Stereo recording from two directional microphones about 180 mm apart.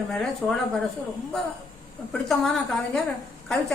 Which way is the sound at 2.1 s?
5° left (ahead or behind).